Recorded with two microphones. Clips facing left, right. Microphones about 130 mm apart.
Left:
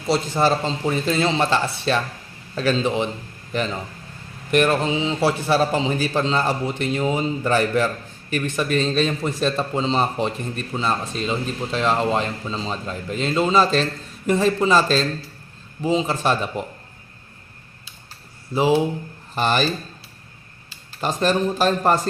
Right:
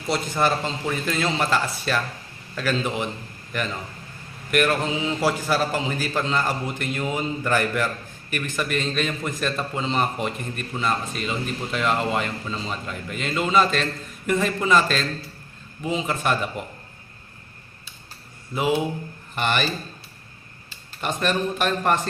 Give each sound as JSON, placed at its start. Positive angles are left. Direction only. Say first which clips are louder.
{"t": 0.1, "sound": "a man's voice", "louder": "left 3 dB", "side_deg": 30}
{"t": 18.5, "sound": "speech", "louder": "left 4 dB", "side_deg": 30}
{"t": 21.0, "sound": "speech", "louder": "left 4 dB", "side_deg": 30}